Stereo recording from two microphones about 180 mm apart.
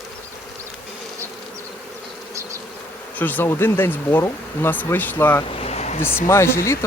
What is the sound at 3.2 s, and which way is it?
Speech, 10° left (ahead or behind).